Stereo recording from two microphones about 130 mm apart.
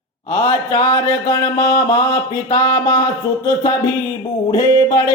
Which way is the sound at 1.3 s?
30° left (ahead or behind).